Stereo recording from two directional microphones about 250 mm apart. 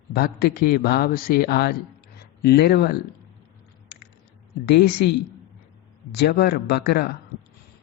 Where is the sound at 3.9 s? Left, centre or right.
Left.